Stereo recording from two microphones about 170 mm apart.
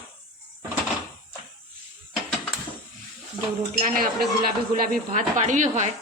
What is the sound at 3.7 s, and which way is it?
A woman's voice, 55° right (ahead or behind).